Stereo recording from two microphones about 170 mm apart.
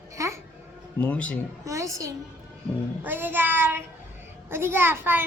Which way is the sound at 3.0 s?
10° right (ahead or behind).